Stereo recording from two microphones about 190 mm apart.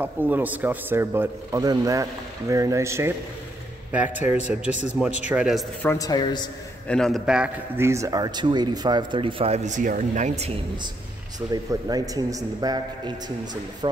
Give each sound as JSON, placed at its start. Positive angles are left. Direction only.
{"t": 0.0, "sound": "speech", "side_deg": -10}
{"t": 5.8, "sound": "speech", "side_deg": 15}
{"t": 6.9, "sound": "a man's voice", "side_deg": 5}
{"t": 11.5, "sound": "a man's voice", "side_deg": -20}